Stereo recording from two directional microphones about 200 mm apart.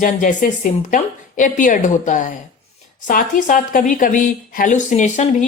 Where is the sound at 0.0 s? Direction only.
40° left (ahead or behind).